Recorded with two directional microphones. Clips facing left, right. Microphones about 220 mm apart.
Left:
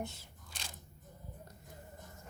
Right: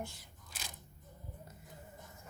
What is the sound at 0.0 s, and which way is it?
Speech, 25° left (ahead or behind).